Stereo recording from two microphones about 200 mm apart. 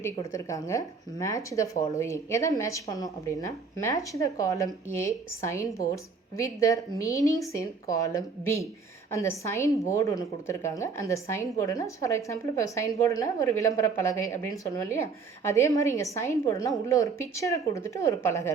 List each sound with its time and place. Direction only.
0.0 s speech: 15° left (ahead or behind)